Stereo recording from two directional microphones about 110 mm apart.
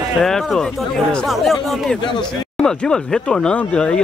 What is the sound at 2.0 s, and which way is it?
Speech, 45° left (ahead or behind).